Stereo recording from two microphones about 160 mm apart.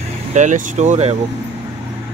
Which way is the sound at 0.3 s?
50° right (ahead or behind).